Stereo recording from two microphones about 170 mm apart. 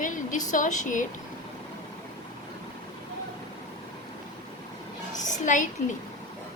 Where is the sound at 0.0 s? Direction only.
50° left (ahead or behind).